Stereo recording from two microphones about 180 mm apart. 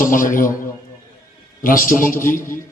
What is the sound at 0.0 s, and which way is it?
Speech, 50° left (ahead or behind).